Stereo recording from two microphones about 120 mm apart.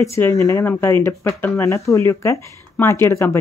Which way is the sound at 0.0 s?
25° left (ahead or behind).